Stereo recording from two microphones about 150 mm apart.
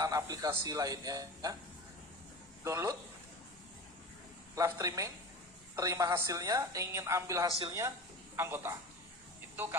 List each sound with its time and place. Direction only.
0.0 s a woman's voice: 25° right (ahead or behind)
2.6 s a woman's voice: 20° right (ahead or behind)
4.5 s a woman's voice: 20° right (ahead or behind)